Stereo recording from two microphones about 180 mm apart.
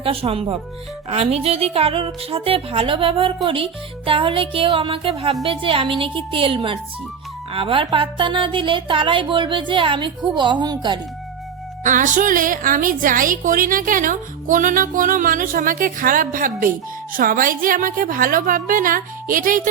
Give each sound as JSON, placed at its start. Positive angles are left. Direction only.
{"t": 0.0, "sound": "speech", "side_deg": -30}
{"t": 11.8, "sound": "a woman's voice", "side_deg": -45}